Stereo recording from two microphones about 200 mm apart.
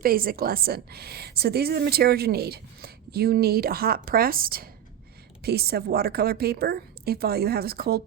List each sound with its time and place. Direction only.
0.0 s a woman's voice: 45° right (ahead or behind)